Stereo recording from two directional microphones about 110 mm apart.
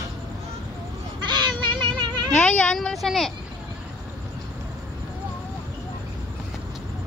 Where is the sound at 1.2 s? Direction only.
40° right (ahead or behind).